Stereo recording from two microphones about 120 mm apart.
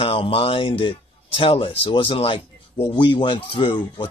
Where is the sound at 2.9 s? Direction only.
40° left (ahead or behind).